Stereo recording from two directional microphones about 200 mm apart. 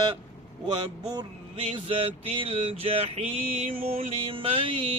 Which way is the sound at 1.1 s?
25° right (ahead or behind).